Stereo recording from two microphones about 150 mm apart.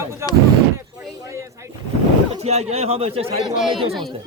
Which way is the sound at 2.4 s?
45° right (ahead or behind).